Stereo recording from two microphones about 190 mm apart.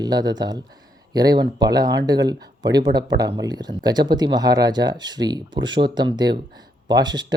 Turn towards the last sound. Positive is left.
turn(degrees=-20)  # may be behind; listen again after turning